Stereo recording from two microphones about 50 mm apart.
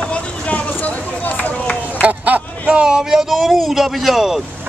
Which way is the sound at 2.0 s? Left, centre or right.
Right.